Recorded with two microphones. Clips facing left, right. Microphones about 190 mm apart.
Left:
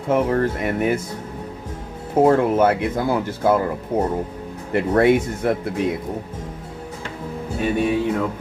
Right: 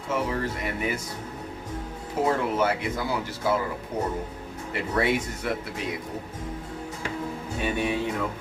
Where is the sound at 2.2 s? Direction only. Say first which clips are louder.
Left 9 dB; 55° left (ahead or behind).